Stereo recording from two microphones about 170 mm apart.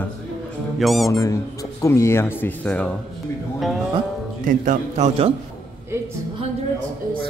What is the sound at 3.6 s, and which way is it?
Music, centre (ahead or behind).